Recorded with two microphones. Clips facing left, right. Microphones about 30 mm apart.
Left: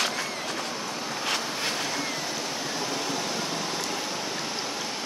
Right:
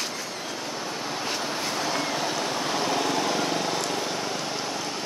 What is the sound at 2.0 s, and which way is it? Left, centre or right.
Vehicle, right.